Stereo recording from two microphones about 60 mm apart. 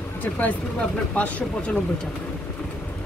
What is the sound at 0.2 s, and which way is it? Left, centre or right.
Speech, left.